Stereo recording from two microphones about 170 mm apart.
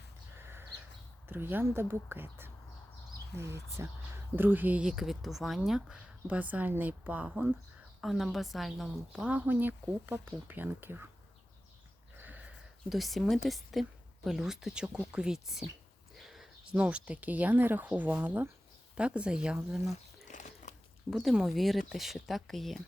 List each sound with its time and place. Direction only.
1.3 s speech: 10° right (ahead or behind)
12.2 s a sound: 10° right (ahead or behind)
13.5 s speech: centre (ahead or behind)
20.3 s biting: 45° left (ahead or behind)
21.1 s speech: centre (ahead or behind)